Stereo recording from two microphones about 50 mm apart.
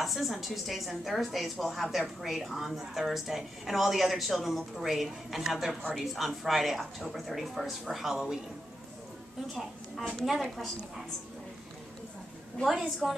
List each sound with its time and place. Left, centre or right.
0.0 s speech: centre
9.5 s speech: centre
13.0 s speech: centre